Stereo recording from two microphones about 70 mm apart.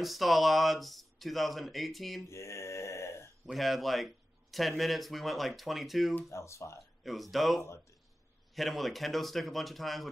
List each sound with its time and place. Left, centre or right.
0.0 s speech: centre
2.2 s mantra: left
3.5 s speech: centre
6.3 s speech: left
7.0 s speech: centre